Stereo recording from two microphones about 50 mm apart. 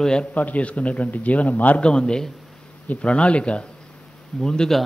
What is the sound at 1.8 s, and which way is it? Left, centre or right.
A man's voice, centre.